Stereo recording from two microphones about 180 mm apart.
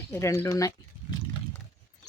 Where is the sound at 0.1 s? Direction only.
15° left (ahead or behind).